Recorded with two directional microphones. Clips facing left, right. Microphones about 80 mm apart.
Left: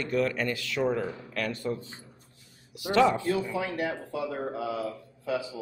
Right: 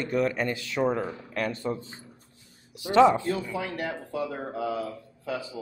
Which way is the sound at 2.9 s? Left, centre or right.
Right.